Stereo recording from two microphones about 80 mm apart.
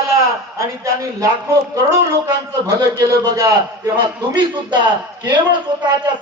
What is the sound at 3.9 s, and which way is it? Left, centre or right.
Speech, right.